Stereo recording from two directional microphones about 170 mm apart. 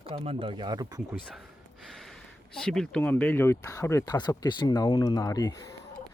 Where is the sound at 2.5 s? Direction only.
5° left (ahead or behind); by 5.7 s 20° left (ahead or behind).